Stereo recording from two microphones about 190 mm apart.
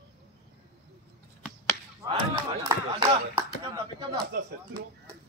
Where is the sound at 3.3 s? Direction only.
20° right (ahead or behind).